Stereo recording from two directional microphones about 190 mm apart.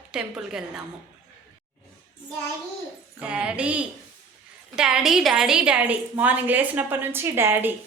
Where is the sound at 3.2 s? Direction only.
5° right (ahead or behind).